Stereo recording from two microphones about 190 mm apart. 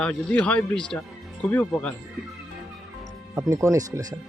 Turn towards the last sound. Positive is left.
turn(degrees=-20)  # may be behind; listen again after turning